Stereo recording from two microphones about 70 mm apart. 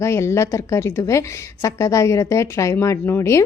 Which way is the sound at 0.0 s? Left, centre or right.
Left.